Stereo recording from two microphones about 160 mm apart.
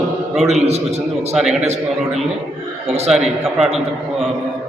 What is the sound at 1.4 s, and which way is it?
Speech, 5° right (ahead or behind).